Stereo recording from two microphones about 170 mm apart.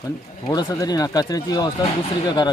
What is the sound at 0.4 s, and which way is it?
Speech, 20° left (ahead or behind).